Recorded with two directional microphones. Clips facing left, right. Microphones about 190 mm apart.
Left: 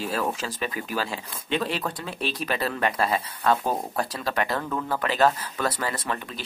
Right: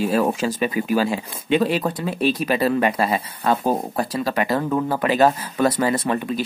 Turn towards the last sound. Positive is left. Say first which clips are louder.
# right 10 dB
turn(degrees=-15)  # may be behind; listen again after turning